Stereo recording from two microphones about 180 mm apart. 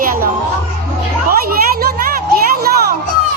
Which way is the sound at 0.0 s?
50° right (ahead or behind).